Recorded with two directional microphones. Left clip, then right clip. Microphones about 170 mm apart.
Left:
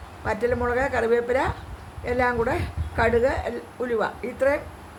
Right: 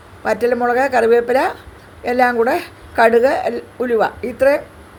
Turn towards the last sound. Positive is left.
turn(degrees=-30)  # may be behind; listen again after turning